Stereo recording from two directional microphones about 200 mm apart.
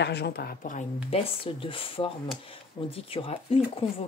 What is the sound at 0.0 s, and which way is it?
Speech, 55° left (ahead or behind).